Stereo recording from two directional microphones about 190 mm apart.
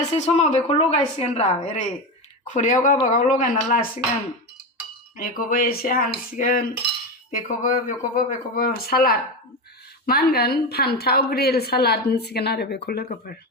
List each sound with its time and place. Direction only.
0.3 s a woman's voice: 35° left (ahead or behind)
5.1 s a woman's voice: 50° left (ahead or behind)